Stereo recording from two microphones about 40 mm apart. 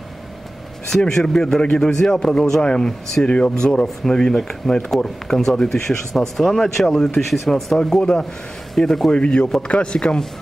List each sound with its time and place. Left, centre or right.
0.8 s speech: centre
7.8 s speech: centre
9.1 s speech: left